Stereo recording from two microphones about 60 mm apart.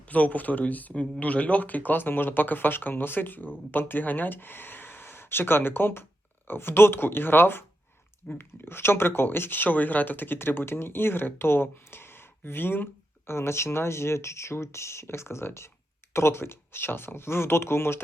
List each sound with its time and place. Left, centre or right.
0.0 s speech: left